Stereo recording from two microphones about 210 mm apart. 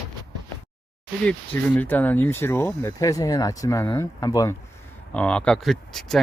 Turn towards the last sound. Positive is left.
turn(degrees=0)  # may be behind; listen again after turning